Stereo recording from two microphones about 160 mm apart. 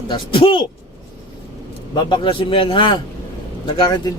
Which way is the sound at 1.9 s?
30° left (ahead or behind).